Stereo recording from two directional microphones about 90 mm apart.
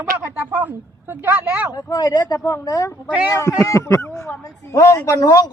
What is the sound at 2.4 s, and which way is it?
Speech, 30° left (ahead or behind).